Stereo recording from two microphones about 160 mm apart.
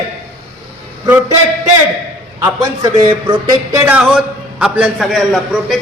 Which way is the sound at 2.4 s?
25° right (ahead or behind).